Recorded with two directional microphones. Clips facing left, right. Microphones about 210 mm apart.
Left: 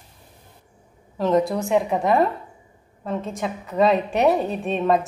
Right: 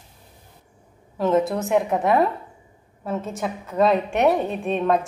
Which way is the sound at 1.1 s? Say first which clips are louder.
Even; centre (ahead or behind).